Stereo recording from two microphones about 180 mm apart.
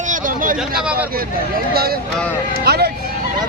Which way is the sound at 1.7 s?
60° right (ahead or behind).